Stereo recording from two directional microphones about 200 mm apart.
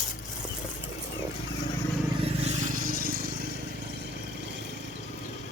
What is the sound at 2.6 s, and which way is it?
Vehicle, 45° right (ahead or behind).